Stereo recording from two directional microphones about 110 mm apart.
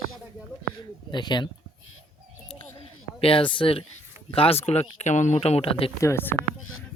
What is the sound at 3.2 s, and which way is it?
Speech, 55° left (ahead or behind).